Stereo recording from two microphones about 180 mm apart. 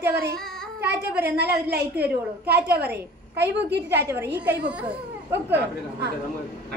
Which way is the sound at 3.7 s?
65° right (ahead or behind).